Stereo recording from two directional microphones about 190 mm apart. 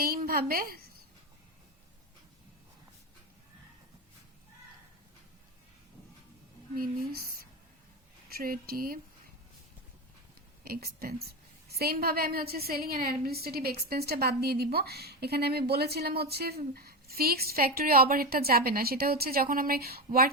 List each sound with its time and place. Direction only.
0.0 s a woman's voice: 50° right (ahead or behind)
6.7 s a woman's voice: 50° right (ahead or behind)
10.6 s a woman's voice: 50° right (ahead or behind)